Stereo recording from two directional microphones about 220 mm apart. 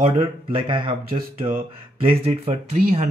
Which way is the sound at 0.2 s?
25° right (ahead or behind).